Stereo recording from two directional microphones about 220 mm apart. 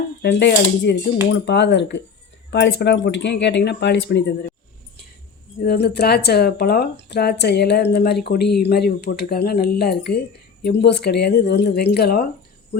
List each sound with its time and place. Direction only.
0.2 s speech: 50° left (ahead or behind)
5.6 s speech: 50° left (ahead or behind)